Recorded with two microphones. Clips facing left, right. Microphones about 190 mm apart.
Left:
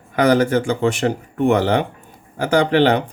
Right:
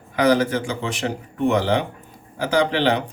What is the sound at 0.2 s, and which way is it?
Speech, 55° left (ahead or behind).